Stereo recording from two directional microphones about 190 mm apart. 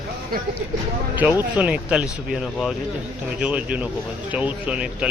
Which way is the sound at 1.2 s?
10° right (ahead or behind).